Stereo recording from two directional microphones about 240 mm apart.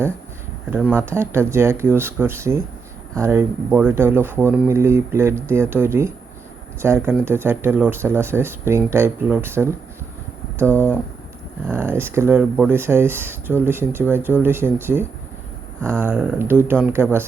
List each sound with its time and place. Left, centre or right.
0.7 s speech: centre
11.6 s speech: centre